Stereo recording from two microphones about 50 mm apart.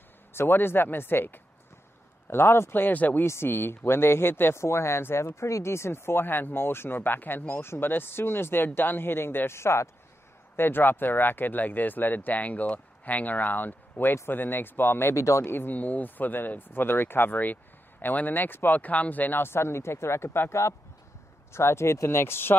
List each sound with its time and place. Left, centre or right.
0.3 s speech: left
3.4 s speech: left
4.6 s speech: left
9.6 s speech: left
10.5 s speech: left
15.1 s speech: left
15.4 s speech: left
15.7 s speech: left
19.4 s speech: left